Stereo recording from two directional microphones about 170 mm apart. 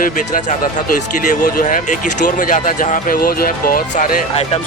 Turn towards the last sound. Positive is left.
turn(degrees=55)  # may be behind; listen again after turning